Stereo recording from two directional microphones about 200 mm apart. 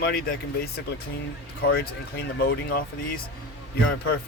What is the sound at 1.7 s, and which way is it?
Speech, 50° left (ahead or behind).